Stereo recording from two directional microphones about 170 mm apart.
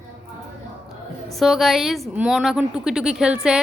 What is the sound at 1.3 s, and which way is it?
A woman's voice, centre (ahead or behind).